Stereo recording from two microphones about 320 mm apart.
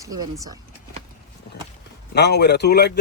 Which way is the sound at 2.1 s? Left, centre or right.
Left.